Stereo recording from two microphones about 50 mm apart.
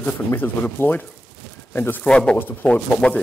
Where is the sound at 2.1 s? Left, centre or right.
Centre.